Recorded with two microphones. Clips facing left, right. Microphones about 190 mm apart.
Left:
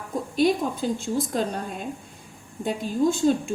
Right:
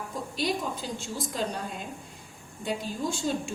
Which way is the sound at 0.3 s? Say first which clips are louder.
Left 9 dB; 55° left (ahead or behind).